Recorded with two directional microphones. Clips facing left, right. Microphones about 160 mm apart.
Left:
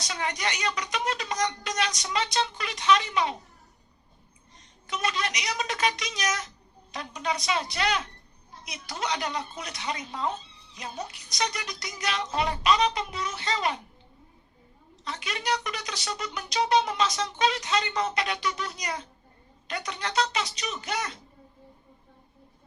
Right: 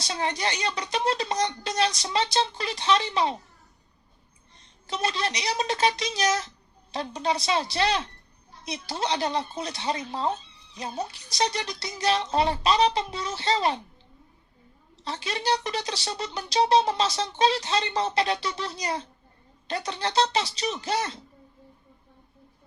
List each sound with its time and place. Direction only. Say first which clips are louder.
0.0 s speech: right 3 dB; 30° right (ahead or behind)
4.9 s speech: right 2 dB; 30° right (ahead or behind)
15.0 s speech: right 4 dB; 30° right (ahead or behind)